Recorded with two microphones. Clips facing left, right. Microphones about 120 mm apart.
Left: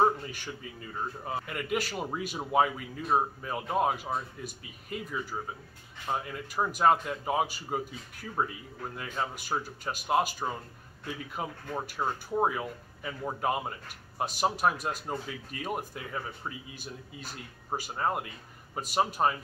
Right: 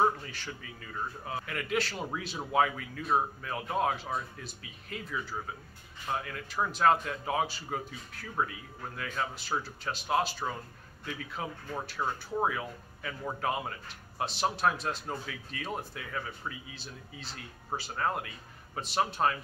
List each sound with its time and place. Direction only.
0.0 s a sound: 15° left (ahead or behind)
1.5 s speech: 10° left (ahead or behind)
17.3 s speech: 10° left (ahead or behind)